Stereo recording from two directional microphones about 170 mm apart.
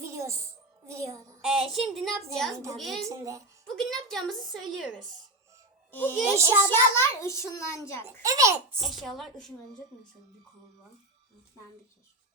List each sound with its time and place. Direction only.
0.0 s music: 15° right (ahead or behind)
1.5 s a woman's voice: centre (ahead or behind)
3.1 s a child's voice: 20° right (ahead or behind)
3.7 s a woman's voice: centre (ahead or behind)
5.9 s a child's voice: 10° left (ahead or behind)
6.1 s a child's voice: 15° right (ahead or behind)
6.7 s a child's voice: 15° left (ahead or behind)
8.2 s a child's voice: 20° right (ahead or behind)
8.8 s a woman's voice: centre (ahead or behind)